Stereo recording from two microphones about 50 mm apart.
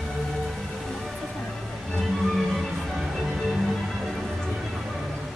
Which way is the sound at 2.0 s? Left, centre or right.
Centre.